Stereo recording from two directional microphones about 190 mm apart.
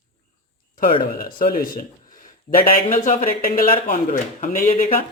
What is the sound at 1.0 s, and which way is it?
Speech, 50° left (ahead or behind).